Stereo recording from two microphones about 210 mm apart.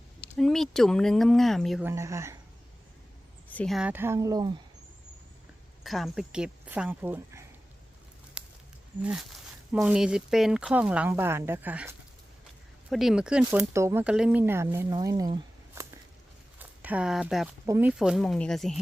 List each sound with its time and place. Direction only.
0.3 s speech: centre (ahead or behind)
1.8 s speech: 15° right (ahead or behind)
3.5 s speech: 5° left (ahead or behind); by 4.5 s 20° right (ahead or behind)
5.8 s speech: centre (ahead or behind)
8.4 s a sound: 5° right (ahead or behind)
9.0 s speech: 5° right (ahead or behind)
15.8 s a sound: 15° right (ahead or behind)
16.6 s speech: 5° right (ahead or behind)